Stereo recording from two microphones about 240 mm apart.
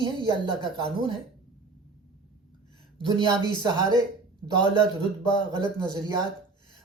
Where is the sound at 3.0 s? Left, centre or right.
Centre.